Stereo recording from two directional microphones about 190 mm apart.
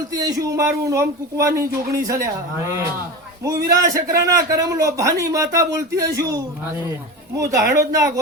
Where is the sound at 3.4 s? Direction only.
15° right (ahead or behind).